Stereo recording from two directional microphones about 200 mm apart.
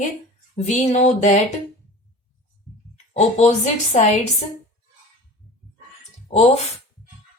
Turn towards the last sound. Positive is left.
turn(degrees=35)  # may be behind; listen again after turning